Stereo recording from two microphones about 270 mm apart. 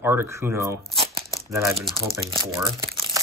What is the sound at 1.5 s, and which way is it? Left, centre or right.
Speech, centre.